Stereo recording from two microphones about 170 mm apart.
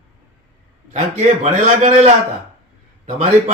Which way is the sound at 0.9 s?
40° right (ahead or behind).